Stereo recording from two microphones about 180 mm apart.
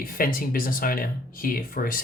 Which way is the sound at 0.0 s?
50° left (ahead or behind).